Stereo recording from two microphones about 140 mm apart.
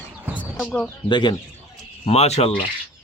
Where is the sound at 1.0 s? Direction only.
35° left (ahead or behind).